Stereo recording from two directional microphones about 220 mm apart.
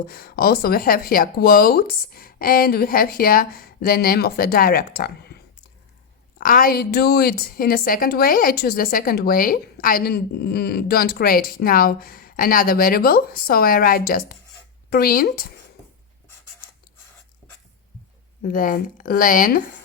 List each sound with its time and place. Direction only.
0.1 s a woman's voice: 45° left (ahead or behind)
6.4 s a woman's voice: 40° left (ahead or behind)
18.4 s speech: 40° left (ahead or behind)